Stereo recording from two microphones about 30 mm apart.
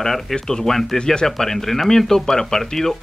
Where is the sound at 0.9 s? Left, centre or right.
Left.